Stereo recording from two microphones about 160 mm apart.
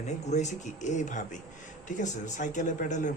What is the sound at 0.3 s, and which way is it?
Speech, 45° left (ahead or behind).